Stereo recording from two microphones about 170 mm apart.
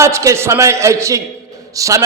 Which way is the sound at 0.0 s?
15° right (ahead or behind).